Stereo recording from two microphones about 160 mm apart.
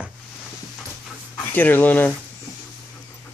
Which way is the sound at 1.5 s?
10° left (ahead or behind).